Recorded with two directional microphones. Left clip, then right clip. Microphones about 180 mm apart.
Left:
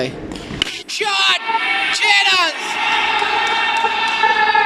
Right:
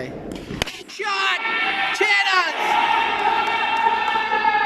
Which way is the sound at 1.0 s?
20° left (ahead or behind).